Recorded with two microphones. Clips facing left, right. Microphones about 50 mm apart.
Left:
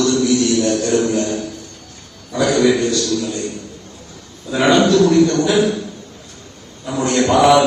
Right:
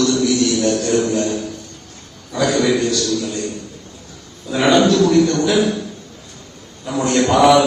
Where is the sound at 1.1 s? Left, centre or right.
Right.